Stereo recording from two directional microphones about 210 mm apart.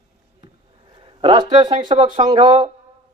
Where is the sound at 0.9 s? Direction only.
25° right (ahead or behind).